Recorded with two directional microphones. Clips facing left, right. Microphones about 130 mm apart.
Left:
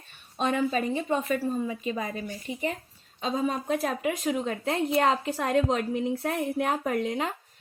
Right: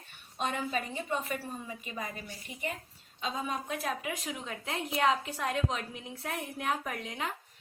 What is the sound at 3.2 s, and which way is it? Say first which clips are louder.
A woman's voice: left 7 dB; 40° left (ahead or behind).